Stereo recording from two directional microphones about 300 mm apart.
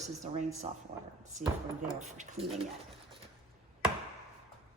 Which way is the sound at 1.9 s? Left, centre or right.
Right.